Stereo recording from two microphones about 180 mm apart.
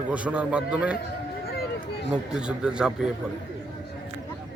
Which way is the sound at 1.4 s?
60° left (ahead or behind).